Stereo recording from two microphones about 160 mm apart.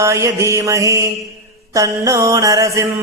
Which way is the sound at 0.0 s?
20° right (ahead or behind).